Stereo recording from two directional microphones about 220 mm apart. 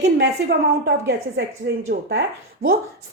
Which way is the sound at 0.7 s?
50° right (ahead or behind).